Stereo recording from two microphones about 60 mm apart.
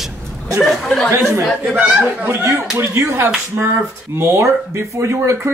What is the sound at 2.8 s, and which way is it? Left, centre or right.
Speech, right.